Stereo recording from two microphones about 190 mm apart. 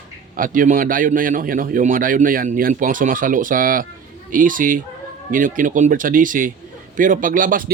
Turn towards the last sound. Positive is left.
turn(degrees=-45)  # may be behind; listen again after turning